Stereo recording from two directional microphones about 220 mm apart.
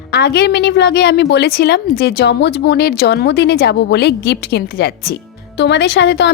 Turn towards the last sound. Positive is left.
turn(degrees=55)  # may be behind; listen again after turning